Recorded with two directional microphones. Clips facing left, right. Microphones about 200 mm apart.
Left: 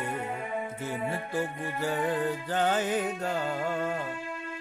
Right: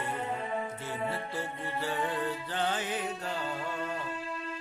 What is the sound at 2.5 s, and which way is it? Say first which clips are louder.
Speech: left 8 dB; 45° left (ahead or behind).